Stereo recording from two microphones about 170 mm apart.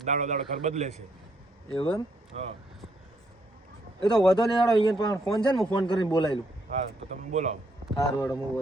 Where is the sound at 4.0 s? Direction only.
25° left (ahead or behind).